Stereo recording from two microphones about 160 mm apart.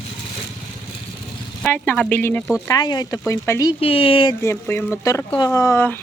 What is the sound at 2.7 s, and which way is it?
Speech, 25° left (ahead or behind).